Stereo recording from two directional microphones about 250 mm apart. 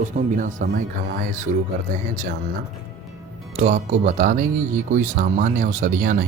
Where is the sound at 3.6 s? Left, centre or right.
Right.